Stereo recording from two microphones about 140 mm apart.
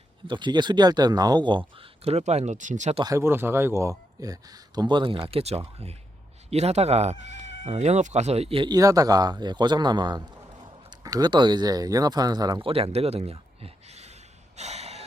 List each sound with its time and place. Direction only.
0.3 s speech: 35° right (ahead or behind); by 2.9 s 60° right (ahead or behind)
3.0 s a man's voice: 20° right (ahead or behind); by 15.0 s 50° right (ahead or behind)